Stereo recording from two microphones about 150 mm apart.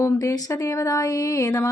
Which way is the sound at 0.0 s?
20° left (ahead or behind).